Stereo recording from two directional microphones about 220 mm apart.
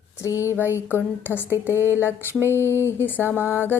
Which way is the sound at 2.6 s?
10° right (ahead or behind).